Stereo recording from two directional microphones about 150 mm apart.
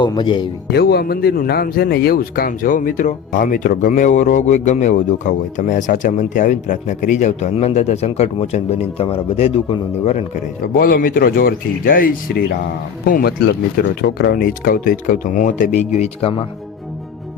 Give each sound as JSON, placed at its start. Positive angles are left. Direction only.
{"t": 0.0, "sound": "speech", "side_deg": 30}
{"t": 0.7, "sound": "a man's voice", "side_deg": 90}
{"t": 10.8, "sound": "speech", "side_deg": 75}
{"t": 14.0, "sound": "a man's voice", "side_deg": 90}